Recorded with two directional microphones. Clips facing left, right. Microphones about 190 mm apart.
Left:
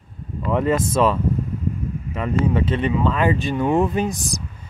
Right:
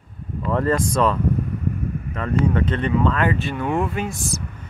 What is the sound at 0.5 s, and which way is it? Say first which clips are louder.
Speech: left 1 dB; 15° left (ahead or behind).